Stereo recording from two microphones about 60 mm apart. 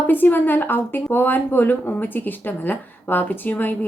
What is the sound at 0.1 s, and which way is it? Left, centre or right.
Speech, left.